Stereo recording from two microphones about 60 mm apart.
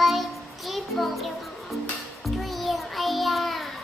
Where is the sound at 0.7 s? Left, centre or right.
Centre.